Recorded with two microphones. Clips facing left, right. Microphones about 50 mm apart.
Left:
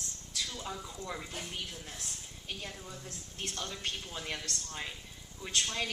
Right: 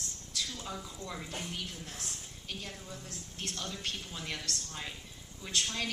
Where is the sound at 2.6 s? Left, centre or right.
Centre.